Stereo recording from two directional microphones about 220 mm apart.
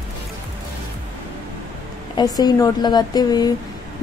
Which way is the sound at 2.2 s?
15° left (ahead or behind).